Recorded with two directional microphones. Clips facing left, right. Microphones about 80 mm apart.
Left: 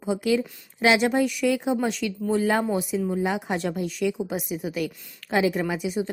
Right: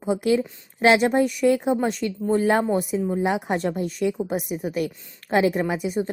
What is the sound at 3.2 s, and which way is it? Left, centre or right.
Speech, right.